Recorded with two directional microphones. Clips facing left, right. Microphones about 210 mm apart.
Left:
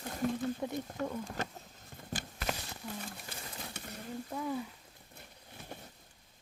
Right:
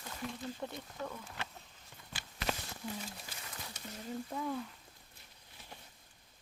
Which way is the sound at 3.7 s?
65° left (ahead or behind).